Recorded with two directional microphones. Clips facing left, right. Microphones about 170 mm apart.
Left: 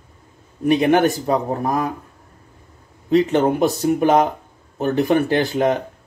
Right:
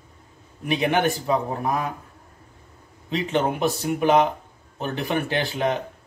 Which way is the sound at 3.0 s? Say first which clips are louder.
Left 8 dB; 45° left (ahead or behind).